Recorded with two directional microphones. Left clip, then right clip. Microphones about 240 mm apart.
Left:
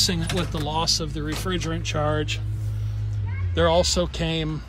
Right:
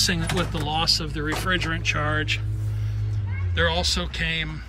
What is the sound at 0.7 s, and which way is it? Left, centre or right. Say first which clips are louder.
Speech: right 1 dB; centre.